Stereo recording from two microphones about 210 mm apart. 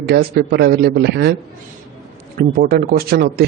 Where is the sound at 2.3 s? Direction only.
45° right (ahead or behind).